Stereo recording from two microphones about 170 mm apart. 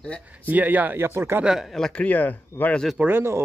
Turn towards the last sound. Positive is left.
turn(degrees=-15)  # may be behind; listen again after turning